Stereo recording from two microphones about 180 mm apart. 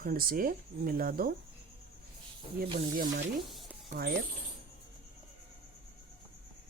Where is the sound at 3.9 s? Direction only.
60° right (ahead or behind).